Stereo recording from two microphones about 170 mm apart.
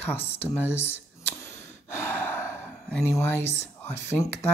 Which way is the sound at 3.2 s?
15° left (ahead or behind).